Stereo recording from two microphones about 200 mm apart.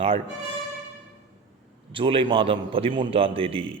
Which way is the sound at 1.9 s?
25° right (ahead or behind).